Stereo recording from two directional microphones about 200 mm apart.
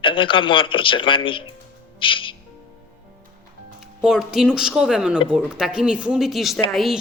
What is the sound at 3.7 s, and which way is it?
A woman's voice, centre (ahead or behind).